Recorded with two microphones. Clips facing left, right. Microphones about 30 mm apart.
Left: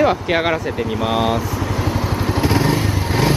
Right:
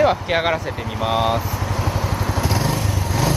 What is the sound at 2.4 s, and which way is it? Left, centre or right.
Vehicle, left.